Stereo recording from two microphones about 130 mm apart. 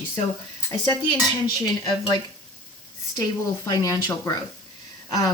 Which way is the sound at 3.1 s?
35° left (ahead or behind).